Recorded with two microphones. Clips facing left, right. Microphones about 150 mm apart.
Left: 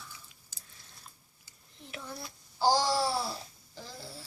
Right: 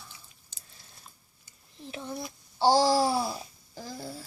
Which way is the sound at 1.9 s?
25° right (ahead or behind).